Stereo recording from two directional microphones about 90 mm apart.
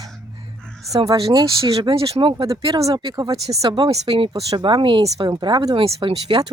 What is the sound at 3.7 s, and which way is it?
Speech, 65° right (ahead or behind).